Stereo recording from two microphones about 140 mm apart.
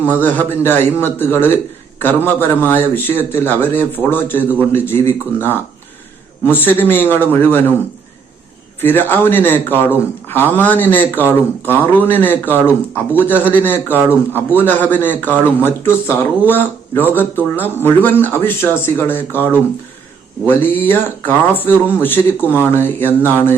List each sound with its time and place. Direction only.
0.1 s a man's voice: 15° left (ahead or behind)
8.8 s a man's voice: 15° left (ahead or behind)